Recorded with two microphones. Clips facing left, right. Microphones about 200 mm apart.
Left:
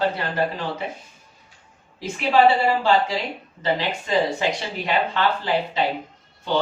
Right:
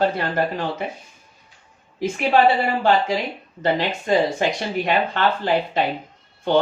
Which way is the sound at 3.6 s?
50° right (ahead or behind).